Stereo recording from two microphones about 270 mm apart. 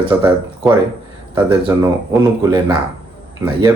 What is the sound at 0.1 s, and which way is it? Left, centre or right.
Speech, centre.